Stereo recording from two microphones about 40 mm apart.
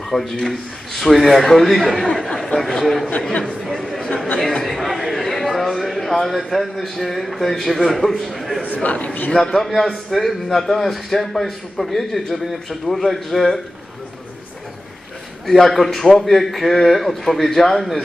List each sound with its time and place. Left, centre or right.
0.1 s a man's voice: centre
3.6 s chatter: centre
4.6 s a man's voice: centre
8.8 s a man's voice: left
9.3 s a man's voice: centre
15.4 s a man's voice: centre